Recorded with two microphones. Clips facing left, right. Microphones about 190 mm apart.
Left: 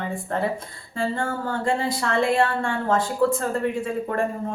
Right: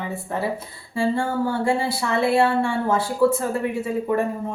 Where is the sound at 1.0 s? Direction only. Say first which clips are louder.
Right 4 dB; 10° right (ahead or behind).